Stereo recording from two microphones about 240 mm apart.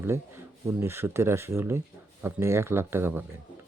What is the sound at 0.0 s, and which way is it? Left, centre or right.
Speech, centre.